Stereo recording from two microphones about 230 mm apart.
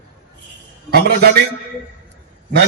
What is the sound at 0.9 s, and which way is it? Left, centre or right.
Speech, right.